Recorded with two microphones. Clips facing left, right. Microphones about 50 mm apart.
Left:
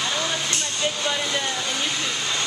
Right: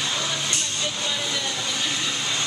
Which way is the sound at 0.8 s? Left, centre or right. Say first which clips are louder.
Left 6 dB; left.